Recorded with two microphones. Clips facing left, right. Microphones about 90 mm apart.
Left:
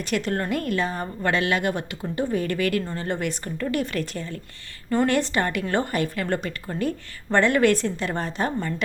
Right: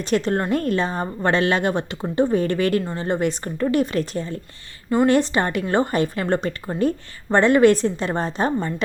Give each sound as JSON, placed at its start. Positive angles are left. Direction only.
{"t": 0.0, "sound": "a woman's voice", "side_deg": -25}